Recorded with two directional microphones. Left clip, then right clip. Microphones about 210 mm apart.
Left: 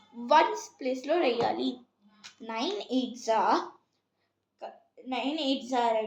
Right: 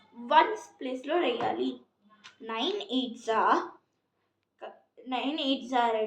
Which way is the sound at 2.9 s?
15° left (ahead or behind).